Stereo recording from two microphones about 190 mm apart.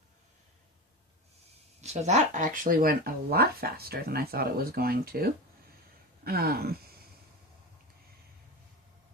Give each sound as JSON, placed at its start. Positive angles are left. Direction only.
{"t": 1.8, "sound": "speech", "side_deg": -35}